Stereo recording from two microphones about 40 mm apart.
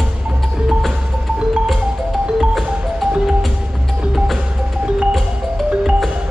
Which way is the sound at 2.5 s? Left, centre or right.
Centre.